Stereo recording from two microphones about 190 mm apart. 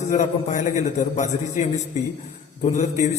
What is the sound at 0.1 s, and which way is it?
A man's voice, 40° left (ahead or behind).